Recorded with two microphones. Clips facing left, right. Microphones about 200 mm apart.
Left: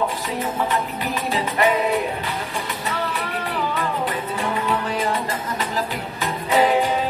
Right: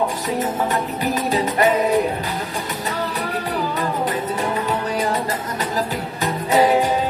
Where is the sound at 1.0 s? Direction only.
40° right (ahead or behind).